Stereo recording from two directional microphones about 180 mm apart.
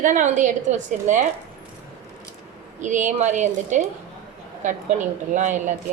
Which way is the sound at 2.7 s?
45° right (ahead or behind).